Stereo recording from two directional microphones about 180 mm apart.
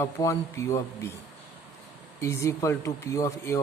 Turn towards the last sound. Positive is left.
turn(degrees=15)  # may be behind; listen again after turning